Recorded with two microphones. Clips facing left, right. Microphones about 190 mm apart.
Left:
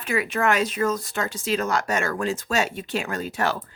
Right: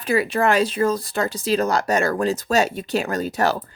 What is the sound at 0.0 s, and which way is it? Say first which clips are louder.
A woman's voice: right 4 dB; 35° right (ahead or behind).